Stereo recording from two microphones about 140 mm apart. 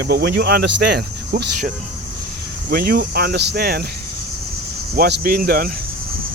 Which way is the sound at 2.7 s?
90° right.